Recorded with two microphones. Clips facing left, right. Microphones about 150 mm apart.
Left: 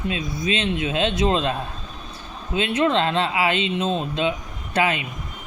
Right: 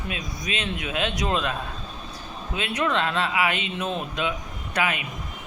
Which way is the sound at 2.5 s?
25° left (ahead or behind).